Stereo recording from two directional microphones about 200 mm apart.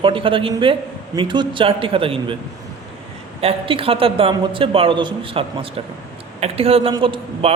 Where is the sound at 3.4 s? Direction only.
30° right (ahead or behind).